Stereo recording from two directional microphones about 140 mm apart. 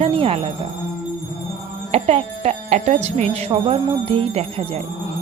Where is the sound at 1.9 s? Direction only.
50° right (ahead or behind).